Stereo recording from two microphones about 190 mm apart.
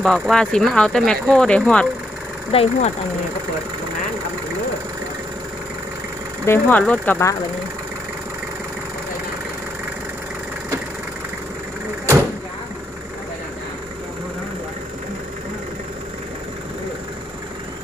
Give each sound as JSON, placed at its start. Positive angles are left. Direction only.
{"t": 0.0, "sound": "speech", "side_deg": 5}
{"t": 2.5, "sound": "speech", "side_deg": 30}
{"t": 6.4, "sound": "speech", "side_deg": 10}